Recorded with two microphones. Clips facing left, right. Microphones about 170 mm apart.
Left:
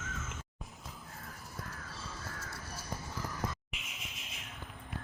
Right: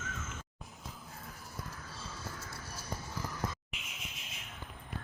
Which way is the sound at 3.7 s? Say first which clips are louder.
Even; centre (ahead or behind).